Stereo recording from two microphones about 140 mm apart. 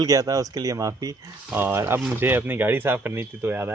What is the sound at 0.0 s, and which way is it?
Speech, 25° right (ahead or behind).